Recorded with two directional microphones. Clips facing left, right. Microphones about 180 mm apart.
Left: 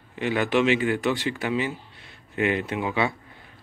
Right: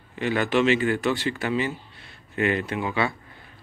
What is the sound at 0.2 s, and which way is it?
Speech, 15° left (ahead or behind).